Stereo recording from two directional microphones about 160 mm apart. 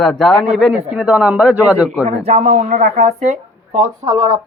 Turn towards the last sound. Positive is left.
turn(degrees=-30)  # may be behind; listen again after turning